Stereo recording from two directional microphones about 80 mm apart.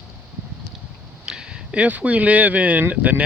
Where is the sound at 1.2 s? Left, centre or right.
Centre.